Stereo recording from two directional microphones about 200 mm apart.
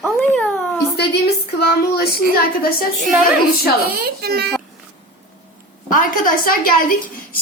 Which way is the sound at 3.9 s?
50° right (ahead or behind).